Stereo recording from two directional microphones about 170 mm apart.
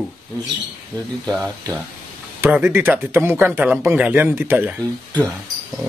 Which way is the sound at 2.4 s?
15° right (ahead or behind).